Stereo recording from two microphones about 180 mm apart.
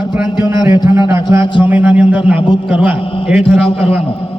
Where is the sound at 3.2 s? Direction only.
5° right (ahead or behind).